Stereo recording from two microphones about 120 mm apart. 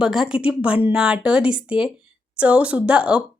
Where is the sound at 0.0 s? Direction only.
5° right (ahead or behind).